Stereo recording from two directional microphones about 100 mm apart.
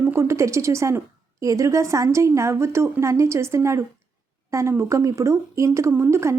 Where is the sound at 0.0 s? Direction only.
25° right (ahead or behind).